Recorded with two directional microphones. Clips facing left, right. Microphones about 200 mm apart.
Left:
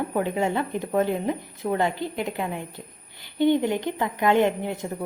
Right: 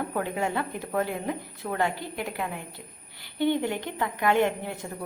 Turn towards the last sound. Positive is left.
turn(degrees=20)  # may be behind; listen again after turning